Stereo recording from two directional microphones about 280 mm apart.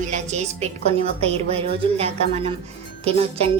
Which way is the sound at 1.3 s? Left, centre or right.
Right.